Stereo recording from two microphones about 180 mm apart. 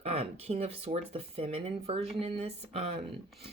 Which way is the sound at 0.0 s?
35° right (ahead or behind).